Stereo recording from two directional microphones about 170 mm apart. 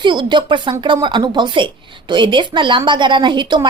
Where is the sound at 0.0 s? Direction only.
25° right (ahead or behind).